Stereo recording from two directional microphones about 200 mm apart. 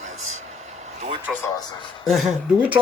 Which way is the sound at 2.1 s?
Centre (ahead or behind).